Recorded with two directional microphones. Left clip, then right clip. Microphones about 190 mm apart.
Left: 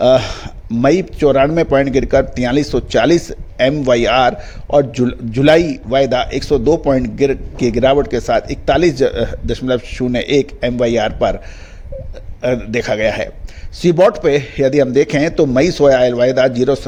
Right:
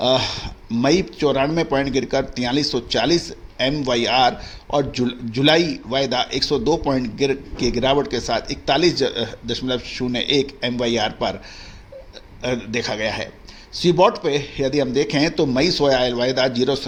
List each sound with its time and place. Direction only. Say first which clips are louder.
0.0 s speech: left 7 dB; 50° left (ahead or behind)
12.4 s speech: left 7 dB; 45° left (ahead or behind)